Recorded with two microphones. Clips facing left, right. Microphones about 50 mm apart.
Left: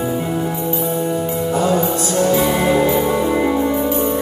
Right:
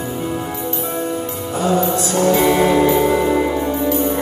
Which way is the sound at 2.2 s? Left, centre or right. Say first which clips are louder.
Right 2 dB; right.